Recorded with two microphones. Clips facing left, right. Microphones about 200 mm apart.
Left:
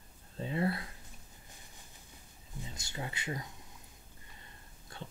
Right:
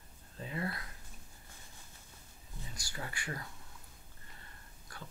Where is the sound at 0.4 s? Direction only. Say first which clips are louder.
Left 6 dB; 30° left (ahead or behind).